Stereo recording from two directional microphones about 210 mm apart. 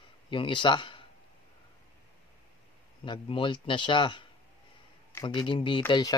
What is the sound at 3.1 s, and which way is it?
Speech, 25° left (ahead or behind).